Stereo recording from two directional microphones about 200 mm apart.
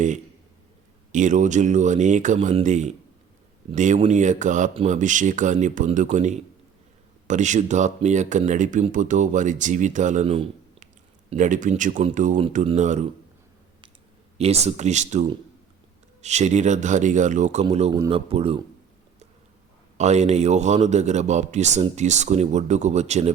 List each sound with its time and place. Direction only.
1.1 s speech: 40° right (ahead or behind)
11.3 s speech: 40° right (ahead or behind)
14.3 s speech: 30° right (ahead or behind)
20.0 s speech: 35° right (ahead or behind)